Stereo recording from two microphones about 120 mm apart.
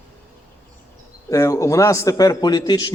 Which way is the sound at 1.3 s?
25° left (ahead or behind).